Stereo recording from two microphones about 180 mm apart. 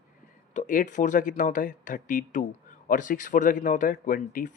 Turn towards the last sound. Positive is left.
turn(degrees=50)  # may be behind; listen again after turning